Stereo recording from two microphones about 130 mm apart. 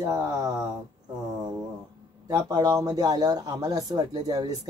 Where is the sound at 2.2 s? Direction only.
30° right (ahead or behind).